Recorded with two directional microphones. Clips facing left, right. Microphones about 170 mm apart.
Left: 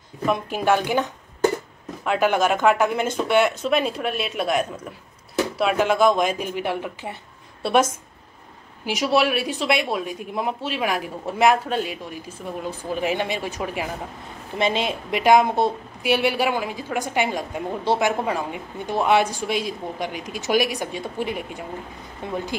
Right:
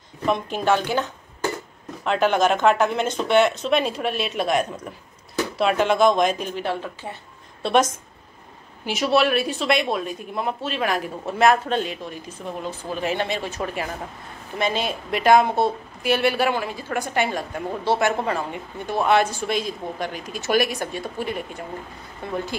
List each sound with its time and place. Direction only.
0.3 s a woman's voice: 10° left (ahead or behind)
2.0 s a woman's voice: 10° left (ahead or behind)
14.6 s a woman's voice: 20° left (ahead or behind)